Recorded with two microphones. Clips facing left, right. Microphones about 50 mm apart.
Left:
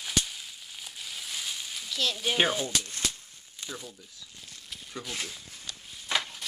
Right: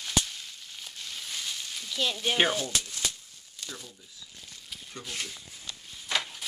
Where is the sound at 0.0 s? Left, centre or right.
Centre.